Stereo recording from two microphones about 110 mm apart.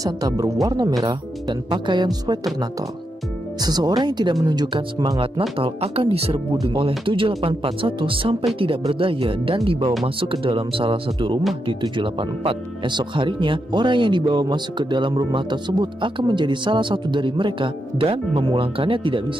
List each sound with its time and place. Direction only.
0.0 s speech: 35° right (ahead or behind)
1.0 s speech: 45° right (ahead or behind)
3.6 s speech: 35° right (ahead or behind)
5.6 s speech: 65° right (ahead or behind)
7.1 s speech: 55° right (ahead or behind)